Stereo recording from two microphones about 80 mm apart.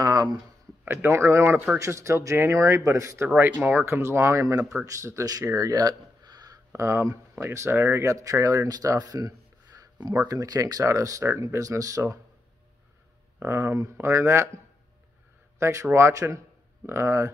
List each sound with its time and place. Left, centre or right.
0.0 s a sound: right
0.8 s speech: right
3.3 s speech: right
6.7 s speech: right
13.4 s speech: right
15.6 s speech: right